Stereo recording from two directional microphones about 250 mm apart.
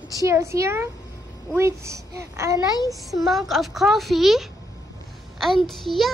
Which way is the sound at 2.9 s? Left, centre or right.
Centre.